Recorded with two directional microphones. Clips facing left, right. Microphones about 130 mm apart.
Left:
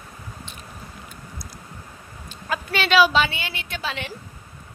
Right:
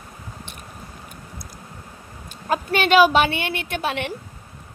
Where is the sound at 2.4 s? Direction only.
45° right (ahead or behind).